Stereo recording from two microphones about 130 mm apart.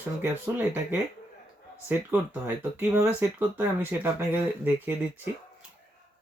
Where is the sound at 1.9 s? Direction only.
15° right (ahead or behind).